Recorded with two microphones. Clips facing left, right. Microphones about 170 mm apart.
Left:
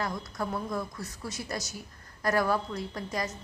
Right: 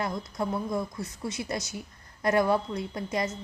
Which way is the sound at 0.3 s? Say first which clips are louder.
Right 3 dB; 20° right (ahead or behind).